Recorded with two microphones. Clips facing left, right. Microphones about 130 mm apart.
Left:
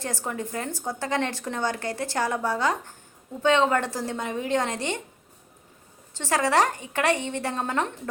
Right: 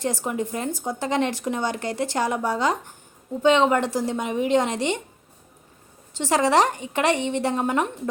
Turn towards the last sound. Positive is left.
turn(degrees=-15)  # may be behind; listen again after turning